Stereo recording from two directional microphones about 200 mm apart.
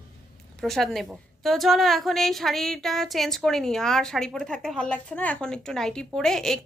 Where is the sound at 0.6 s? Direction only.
Centre (ahead or behind).